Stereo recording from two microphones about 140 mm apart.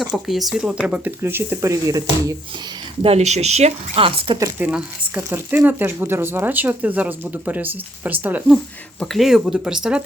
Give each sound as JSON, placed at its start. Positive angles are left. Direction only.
{"t": 0.0, "sound": "speech", "side_deg": 0}
{"t": 3.0, "sound": "speech", "side_deg": -50}
{"t": 4.6, "sound": "speech", "side_deg": -10}
{"t": 9.0, "sound": "speech", "side_deg": 0}